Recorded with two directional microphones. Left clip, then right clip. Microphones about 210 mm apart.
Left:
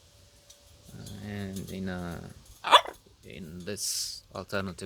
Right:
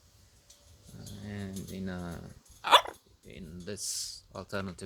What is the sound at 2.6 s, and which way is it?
Dog, 20° right (ahead or behind).